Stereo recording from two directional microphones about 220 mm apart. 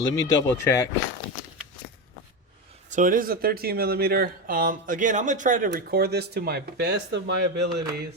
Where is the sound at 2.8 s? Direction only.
35° right (ahead or behind).